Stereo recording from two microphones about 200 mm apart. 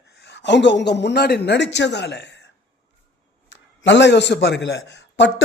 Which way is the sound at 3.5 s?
65° left (ahead or behind).